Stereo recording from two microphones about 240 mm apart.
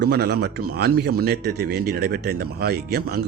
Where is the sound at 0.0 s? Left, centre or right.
Right.